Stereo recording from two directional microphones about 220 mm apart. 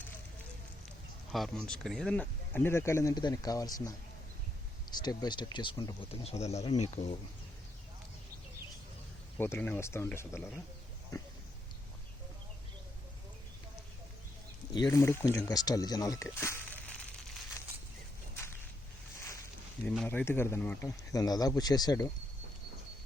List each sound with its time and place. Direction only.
1.3 s speech: centre (ahead or behind); by 7.2 s 30° left (ahead or behind)
9.4 s speech: 10° left (ahead or behind)
14.7 s speech: 15° left (ahead or behind)
18.3 s walk: 10° left (ahead or behind)
19.8 s speech: 5° left (ahead or behind)